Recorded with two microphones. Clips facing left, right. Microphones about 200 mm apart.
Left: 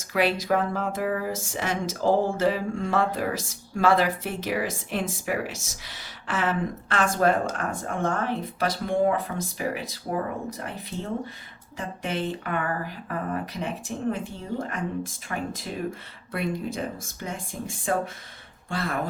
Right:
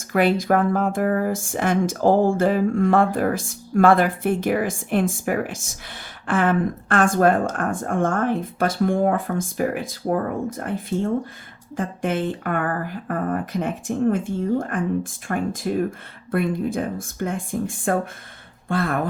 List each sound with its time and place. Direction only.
0.1 s speech: 50° right (ahead or behind)